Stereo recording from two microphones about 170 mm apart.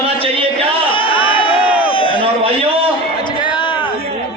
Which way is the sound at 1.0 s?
30° left (ahead or behind).